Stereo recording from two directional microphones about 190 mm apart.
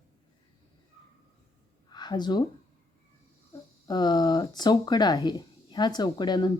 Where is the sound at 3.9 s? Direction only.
20° left (ahead or behind).